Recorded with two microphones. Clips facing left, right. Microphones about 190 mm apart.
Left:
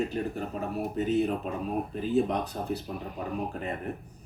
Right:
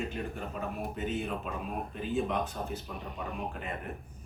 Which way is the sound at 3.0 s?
Centre (ahead or behind).